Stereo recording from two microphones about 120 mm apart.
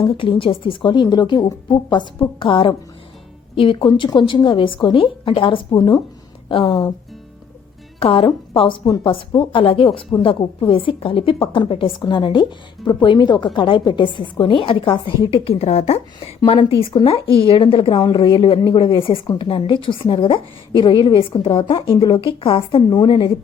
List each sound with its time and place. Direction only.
0.0 s a woman's voice: 50° left (ahead or behind)
7.9 s a woman's voice: 50° left (ahead or behind)
15.4 s a woman's voice: 60° left (ahead or behind)
16.7 s a woman's voice: 50° left (ahead or behind)